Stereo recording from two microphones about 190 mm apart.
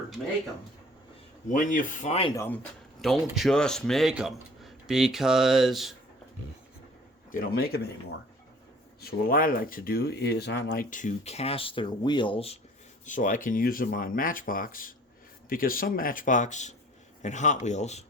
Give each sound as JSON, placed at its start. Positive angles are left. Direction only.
{"t": 1.5, "sound": "speech", "side_deg": 40}
{"t": 2.3, "sound": "speech", "side_deg": 15}
{"t": 3.0, "sound": "a man's voice", "side_deg": 0}
{"t": 7.3, "sound": "speech", "side_deg": 50}
{"t": 9.0, "sound": "speech", "side_deg": 55}
{"t": 10.8, "sound": "speech", "side_deg": 40}
{"t": 13.1, "sound": "speech", "side_deg": 45}